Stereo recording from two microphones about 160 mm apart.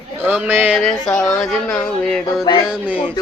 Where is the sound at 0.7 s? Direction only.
Centre (ahead or behind).